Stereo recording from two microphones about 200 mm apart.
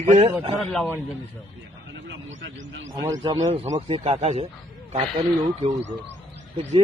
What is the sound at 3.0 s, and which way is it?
A man's voice, 20° right (ahead or behind).